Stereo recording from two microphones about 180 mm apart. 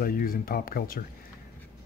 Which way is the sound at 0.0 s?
55° left (ahead or behind).